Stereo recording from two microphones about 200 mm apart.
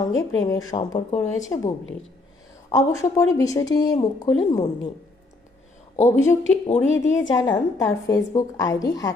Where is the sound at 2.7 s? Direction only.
15° left (ahead or behind).